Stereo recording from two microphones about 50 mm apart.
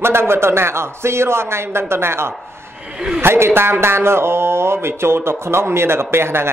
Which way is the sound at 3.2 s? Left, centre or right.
Right.